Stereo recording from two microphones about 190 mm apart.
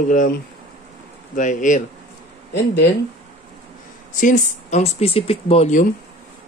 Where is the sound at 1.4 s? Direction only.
40° left (ahead or behind).